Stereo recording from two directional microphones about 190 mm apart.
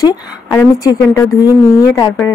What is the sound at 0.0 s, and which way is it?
Speech, 20° left (ahead or behind).